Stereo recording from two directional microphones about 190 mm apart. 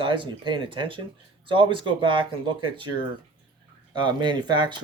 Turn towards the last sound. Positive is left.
turn(degrees=-25)  # may be behind; listen again after turning